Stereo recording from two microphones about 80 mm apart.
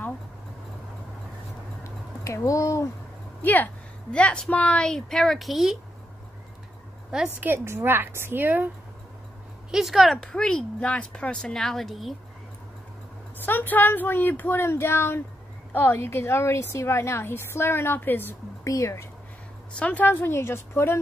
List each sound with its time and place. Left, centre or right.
2.2 s a woman's voice: left
3.4 s speech: left; by 5.8 s centre
7.3 s a woman's voice: right
9.7 s speech: centre
10.1 s speech: centre
13.4 s a woman's voice: left
18.6 s speech: left
19.8 s speech: centre